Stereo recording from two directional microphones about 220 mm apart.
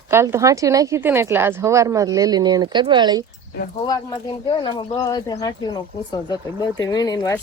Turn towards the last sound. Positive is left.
turn(degrees=15)  # may be behind; listen again after turning